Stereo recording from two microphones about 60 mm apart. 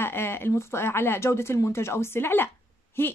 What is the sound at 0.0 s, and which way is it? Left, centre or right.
A woman's voice, left.